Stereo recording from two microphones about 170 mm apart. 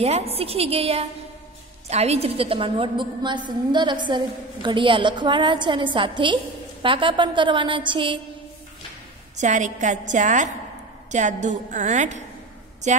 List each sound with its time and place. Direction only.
0.0 s a woman's voice: 35° right (ahead or behind)
9.4 s a woman's voice: 45° right (ahead or behind)